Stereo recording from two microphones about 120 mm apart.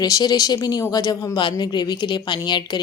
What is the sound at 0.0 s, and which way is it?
Speech, 30° left (ahead or behind).